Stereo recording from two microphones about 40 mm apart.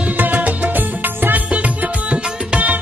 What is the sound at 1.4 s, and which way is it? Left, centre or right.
Music, right.